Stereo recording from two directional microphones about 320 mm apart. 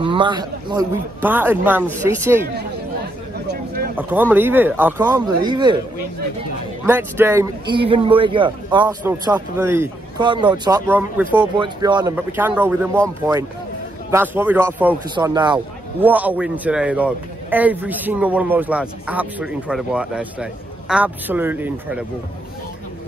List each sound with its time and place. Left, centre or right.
0.0 s speech: centre
3.4 s a sound: right
4.1 s speech: centre
6.9 s speech: centre
14.1 s a man's voice: centre